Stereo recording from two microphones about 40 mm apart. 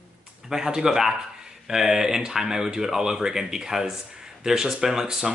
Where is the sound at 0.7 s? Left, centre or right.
Centre.